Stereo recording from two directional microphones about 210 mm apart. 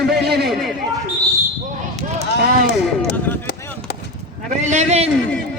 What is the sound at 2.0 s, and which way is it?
Run, 35° right (ahead or behind).